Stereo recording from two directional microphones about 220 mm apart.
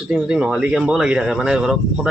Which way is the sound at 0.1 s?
5° right (ahead or behind).